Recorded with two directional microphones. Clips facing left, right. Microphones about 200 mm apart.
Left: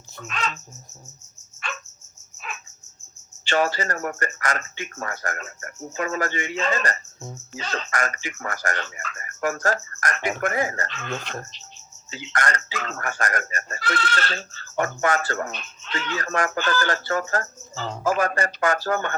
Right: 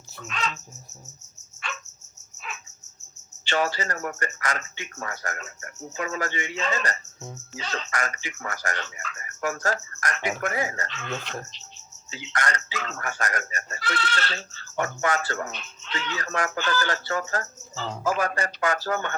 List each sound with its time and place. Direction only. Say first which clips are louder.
0.3 s speech: left 1 dB; 50° left (ahead or behind)
3.4 s speech: left 3 dB; 50° left (ahead or behind)